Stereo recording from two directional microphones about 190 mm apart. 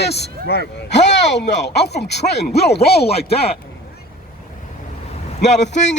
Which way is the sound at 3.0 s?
30° left (ahead or behind).